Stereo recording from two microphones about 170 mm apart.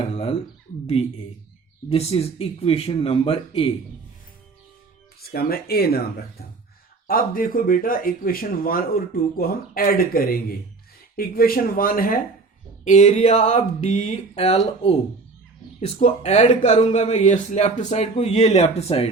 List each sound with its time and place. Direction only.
0.0 s speech: 35° left (ahead or behind)
1.9 s speech: 35° left (ahead or behind)
5.3 s speech: 65° left (ahead or behind)
7.1 s speech: 55° left (ahead or behind)
12.8 s speech: 45° left (ahead or behind)
16.0 s speech: 40° left (ahead or behind)